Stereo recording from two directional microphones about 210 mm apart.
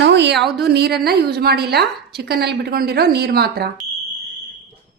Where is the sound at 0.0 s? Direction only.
55° right (ahead or behind).